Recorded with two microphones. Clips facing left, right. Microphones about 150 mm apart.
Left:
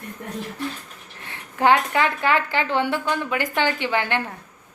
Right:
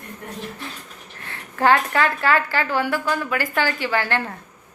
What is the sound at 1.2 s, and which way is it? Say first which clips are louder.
A woman's voice: even; 15° left (ahead or behind).